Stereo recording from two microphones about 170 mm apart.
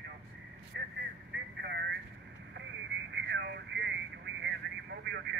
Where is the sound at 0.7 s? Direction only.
90° right.